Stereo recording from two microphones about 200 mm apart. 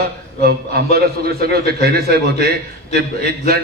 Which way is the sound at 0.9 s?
50° right (ahead or behind).